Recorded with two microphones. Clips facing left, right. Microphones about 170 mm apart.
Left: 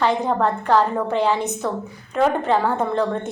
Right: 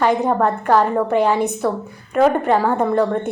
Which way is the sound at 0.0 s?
10° right (ahead or behind).